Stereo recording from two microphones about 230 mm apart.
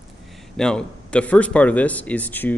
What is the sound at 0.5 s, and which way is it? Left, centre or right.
Speech, centre.